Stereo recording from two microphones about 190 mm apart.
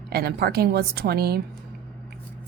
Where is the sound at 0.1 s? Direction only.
55° right (ahead or behind).